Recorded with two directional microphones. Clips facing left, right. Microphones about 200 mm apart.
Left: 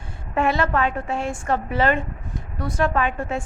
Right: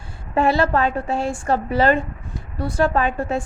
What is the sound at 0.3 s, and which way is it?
A woman's voice, 35° right (ahead or behind).